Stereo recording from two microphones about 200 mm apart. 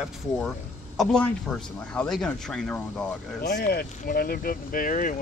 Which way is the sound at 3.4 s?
55° left (ahead or behind).